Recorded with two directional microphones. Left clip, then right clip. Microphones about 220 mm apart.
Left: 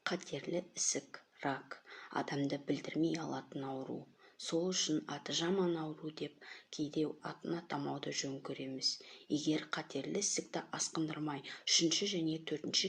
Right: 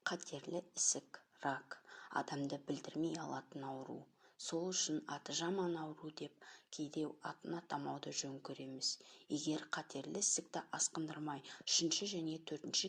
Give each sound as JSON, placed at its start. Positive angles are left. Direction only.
{"t": 0.0, "sound": "speech", "side_deg": -20}